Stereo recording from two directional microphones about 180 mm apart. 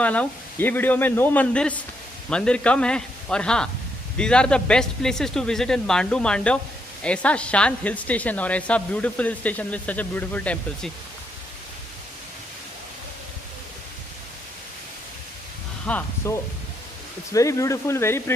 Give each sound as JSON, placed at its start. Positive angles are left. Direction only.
{"t": 0.0, "sound": "speech", "side_deg": 10}
{"t": 15.9, "sound": "speech", "side_deg": 10}